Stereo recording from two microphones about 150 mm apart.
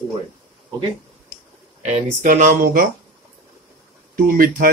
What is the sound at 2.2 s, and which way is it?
Speech, 60° right (ahead or behind).